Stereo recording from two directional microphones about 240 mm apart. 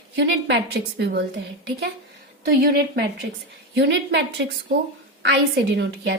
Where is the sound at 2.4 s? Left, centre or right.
Right.